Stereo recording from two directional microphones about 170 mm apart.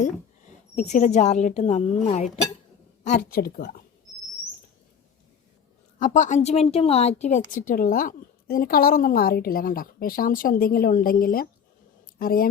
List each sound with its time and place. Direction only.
0.0 s a woman's voice: 45° left (ahead or behind)
3.1 s speech: 60° left (ahead or behind)
6.0 s speech: 50° left (ahead or behind)